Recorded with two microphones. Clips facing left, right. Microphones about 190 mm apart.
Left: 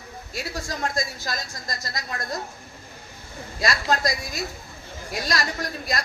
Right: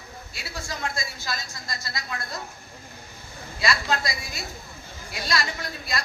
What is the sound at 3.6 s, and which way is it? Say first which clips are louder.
A woman's voice: left 2 dB; 45° left (ahead or behind).